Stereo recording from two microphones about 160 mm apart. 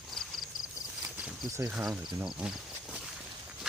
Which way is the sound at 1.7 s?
5° right (ahead or behind).